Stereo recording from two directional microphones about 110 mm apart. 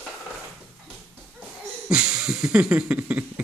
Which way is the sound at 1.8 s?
5° right (ahead or behind).